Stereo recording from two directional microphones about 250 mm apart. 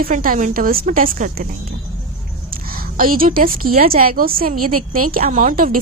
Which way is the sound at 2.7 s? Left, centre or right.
Right.